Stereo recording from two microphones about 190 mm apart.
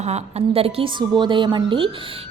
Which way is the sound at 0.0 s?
35° right (ahead or behind).